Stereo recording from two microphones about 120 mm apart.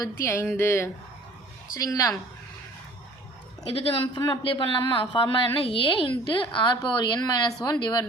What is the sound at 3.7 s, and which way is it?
A woman's voice, 50° left (ahead or behind).